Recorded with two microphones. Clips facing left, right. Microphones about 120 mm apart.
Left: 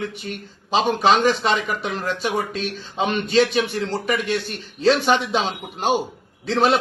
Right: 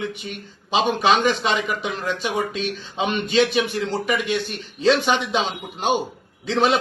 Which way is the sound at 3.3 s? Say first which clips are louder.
Left 1 dB; centre (ahead or behind).